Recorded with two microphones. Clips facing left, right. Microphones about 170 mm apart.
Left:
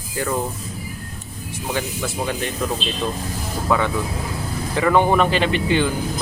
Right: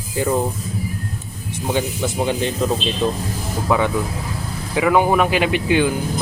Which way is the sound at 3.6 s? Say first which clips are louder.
Right 2 dB; 15° right (ahead or behind).